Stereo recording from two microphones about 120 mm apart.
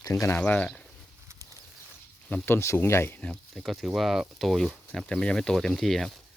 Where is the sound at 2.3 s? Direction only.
20° left (ahead or behind).